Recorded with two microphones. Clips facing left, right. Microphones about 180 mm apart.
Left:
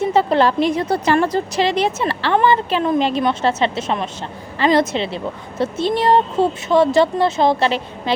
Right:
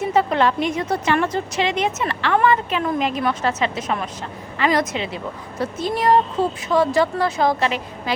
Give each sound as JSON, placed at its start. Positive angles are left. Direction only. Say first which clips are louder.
{"t": 0.0, "sound": "a woman's voice", "louder": "left 3 dB", "side_deg": 30}